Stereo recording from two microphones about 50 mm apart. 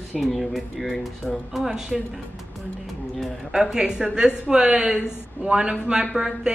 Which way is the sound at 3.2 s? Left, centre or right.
Centre.